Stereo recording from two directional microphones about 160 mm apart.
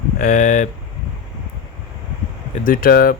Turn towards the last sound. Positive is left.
turn(degrees=65)  # may be behind; listen again after turning